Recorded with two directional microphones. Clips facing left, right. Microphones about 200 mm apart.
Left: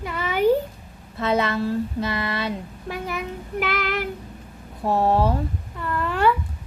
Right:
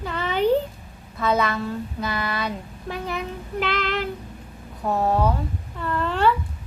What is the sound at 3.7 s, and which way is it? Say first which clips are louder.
Child singing: right 1 dB; 20° right (ahead or behind).